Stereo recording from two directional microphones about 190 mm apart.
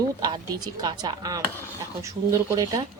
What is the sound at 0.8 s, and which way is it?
Speech, 20° right (ahead or behind).